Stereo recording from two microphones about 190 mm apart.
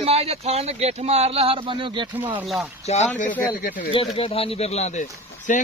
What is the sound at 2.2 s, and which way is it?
Speech, 10° right (ahead or behind).